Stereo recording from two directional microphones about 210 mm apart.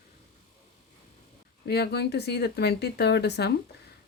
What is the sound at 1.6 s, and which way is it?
Speech, 50° left (ahead or behind).